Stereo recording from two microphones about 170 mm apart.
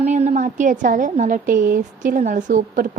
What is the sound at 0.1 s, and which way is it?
A woman's voice, 45° right (ahead or behind).